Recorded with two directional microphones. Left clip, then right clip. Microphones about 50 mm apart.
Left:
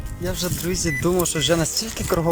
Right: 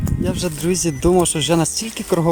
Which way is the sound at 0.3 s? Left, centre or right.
Right.